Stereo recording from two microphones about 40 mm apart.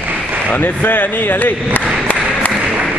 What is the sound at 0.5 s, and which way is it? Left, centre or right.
Speech, left.